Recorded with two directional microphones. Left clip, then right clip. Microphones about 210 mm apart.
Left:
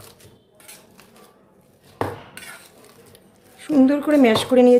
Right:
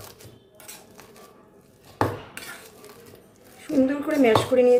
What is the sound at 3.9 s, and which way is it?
Speech, 45° left (ahead or behind).